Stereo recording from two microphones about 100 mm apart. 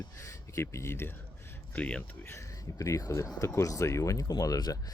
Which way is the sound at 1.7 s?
15° left (ahead or behind).